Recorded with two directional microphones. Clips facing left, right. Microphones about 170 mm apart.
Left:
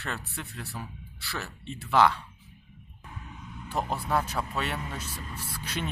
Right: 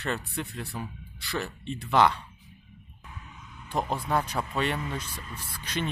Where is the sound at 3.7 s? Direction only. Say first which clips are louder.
Right 1 dB; 5° left (ahead or behind).